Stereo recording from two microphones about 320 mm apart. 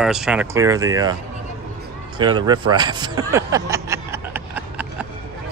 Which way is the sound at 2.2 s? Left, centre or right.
Centre.